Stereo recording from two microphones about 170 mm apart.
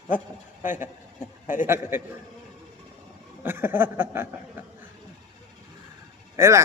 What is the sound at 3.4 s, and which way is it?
A man's voice, 10° right (ahead or behind).